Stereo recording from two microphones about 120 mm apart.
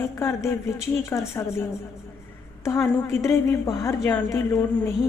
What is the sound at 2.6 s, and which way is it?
A woman's voice, 25° left (ahead or behind).